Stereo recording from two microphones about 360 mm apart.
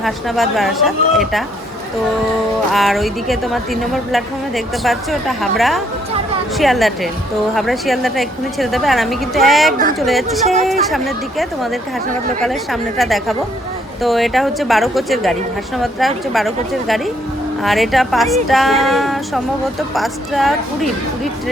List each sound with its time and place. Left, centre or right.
0.0 s a woman's voice: centre
2.7 s a woman's voice: centre
10.4 s speech: centre
10.7 s a woman's voice: centre